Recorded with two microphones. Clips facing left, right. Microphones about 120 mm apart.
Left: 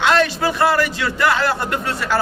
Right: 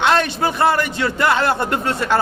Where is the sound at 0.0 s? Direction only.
25° right (ahead or behind).